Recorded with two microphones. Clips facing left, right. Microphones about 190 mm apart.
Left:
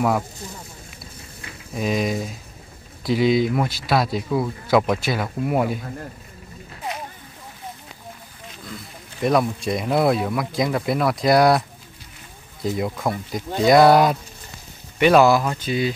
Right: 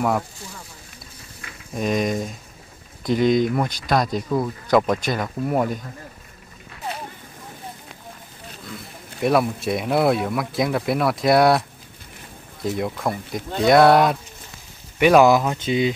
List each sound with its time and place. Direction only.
1.7 s speech: 5° left (ahead or behind)
8.6 s speech: centre (ahead or behind)
12.6 s speech: centre (ahead or behind)
15.0 s speech: 10° right (ahead or behind)